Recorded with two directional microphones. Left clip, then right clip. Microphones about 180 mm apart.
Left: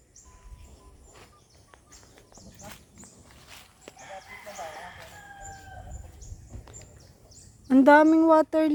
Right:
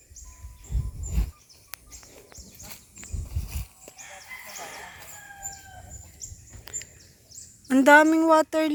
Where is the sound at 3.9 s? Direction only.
55° left (ahead or behind).